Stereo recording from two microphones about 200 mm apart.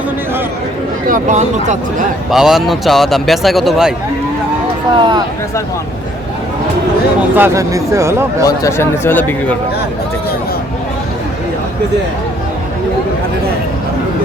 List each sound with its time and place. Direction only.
1.0 s speech: 40° right (ahead or behind)
2.3 s speech: centre (ahead or behind)
4.9 s speech: 25° right (ahead or behind)
7.3 s speech: 15° right (ahead or behind)
8.4 s speech: 15° left (ahead or behind)